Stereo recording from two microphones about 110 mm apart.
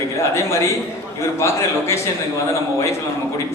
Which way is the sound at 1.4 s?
25° left (ahead or behind).